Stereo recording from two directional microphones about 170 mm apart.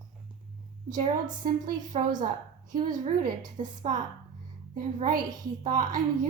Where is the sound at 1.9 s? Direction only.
40° right (ahead or behind).